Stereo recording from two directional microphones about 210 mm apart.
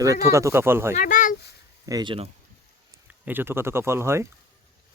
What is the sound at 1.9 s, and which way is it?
Speech, 20° right (ahead or behind).